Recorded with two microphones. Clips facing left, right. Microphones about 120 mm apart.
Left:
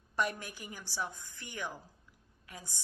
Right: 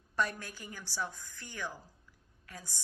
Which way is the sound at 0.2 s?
15° left (ahead or behind).